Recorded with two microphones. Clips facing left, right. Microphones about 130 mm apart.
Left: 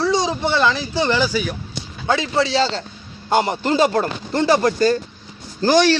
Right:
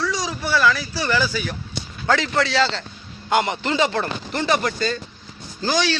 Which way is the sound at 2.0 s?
15° left (ahead or behind).